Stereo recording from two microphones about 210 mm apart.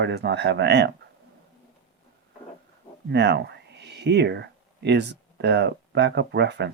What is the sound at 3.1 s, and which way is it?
Speech, 55° right (ahead or behind).